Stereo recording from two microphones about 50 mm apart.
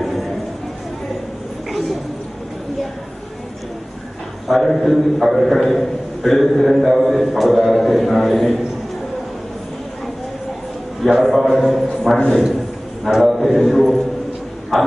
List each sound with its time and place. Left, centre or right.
0.0 s a sound: centre
4.5 s a man's voice: centre
11.1 s a man's voice: centre